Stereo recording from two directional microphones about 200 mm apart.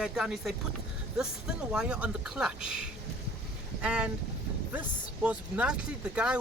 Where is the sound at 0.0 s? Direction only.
Centre (ahead or behind).